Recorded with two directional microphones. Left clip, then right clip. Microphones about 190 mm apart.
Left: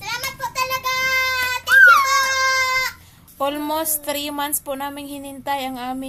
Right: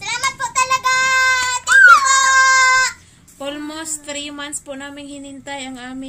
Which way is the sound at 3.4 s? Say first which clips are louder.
Left 5 dB; 35° left (ahead or behind).